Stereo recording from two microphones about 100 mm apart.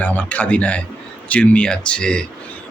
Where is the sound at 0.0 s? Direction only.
15° left (ahead or behind).